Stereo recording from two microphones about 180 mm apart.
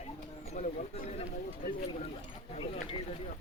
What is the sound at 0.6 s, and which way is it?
Speech, 40° left (ahead or behind).